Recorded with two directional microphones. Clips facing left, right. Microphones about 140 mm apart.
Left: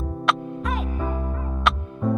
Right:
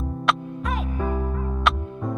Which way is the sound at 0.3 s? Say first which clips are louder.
Left 1 dB; centre (ahead or behind).